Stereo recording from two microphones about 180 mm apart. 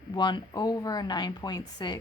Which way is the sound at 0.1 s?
25° left (ahead or behind).